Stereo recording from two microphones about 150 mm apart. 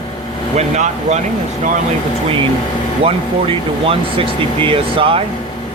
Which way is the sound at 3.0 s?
40° right (ahead or behind).